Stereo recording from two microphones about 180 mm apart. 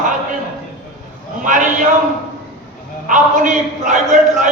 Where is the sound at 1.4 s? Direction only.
45° right (ahead or behind).